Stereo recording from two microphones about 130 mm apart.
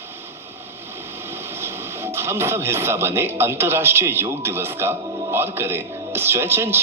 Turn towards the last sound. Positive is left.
turn(degrees=-20)  # may be behind; listen again after turning